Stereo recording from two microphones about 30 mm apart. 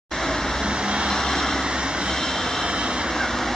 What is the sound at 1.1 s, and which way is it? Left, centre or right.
Vehicle, centre.